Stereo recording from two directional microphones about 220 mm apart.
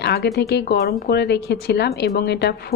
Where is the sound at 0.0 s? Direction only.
50° left (ahead or behind).